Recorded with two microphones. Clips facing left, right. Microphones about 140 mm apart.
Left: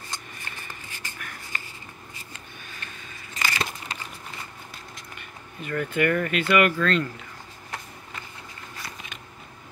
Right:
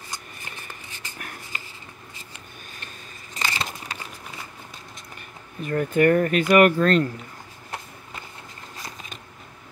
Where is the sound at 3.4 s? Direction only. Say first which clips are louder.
Even; 25° right (ahead or behind).